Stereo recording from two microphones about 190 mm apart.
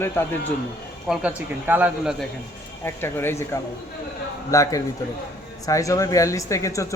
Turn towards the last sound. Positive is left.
turn(degrees=15)  # may be behind; listen again after turning